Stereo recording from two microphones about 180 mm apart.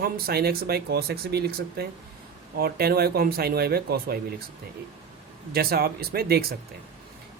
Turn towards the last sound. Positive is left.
turn(degrees=-60)  # may be behind; listen again after turning